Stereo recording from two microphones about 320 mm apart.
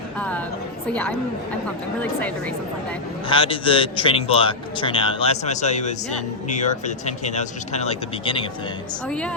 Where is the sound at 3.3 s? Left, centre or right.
Centre.